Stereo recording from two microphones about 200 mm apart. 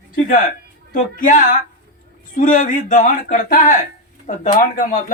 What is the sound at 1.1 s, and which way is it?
Speech, 40° left (ahead or behind).